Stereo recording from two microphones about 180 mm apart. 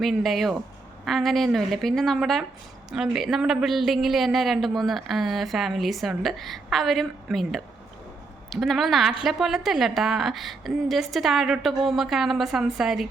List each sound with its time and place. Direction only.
0.0 s a man's voice: centre (ahead or behind)